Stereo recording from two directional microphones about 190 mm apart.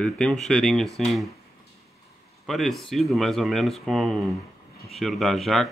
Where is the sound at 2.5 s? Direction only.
Centre (ahead or behind).